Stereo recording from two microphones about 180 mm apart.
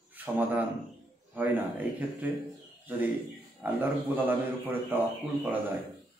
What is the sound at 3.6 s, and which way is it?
A man's voice, 10° right (ahead or behind).